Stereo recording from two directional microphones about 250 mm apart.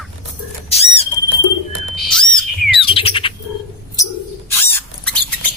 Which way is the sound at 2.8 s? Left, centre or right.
Left.